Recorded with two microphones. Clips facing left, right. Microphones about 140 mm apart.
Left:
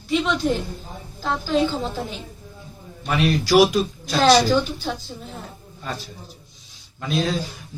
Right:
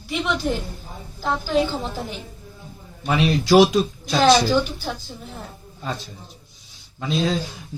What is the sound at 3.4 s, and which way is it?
Speech, 25° right (ahead or behind).